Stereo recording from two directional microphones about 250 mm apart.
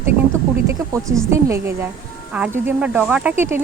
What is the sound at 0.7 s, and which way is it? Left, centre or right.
Speech, centre.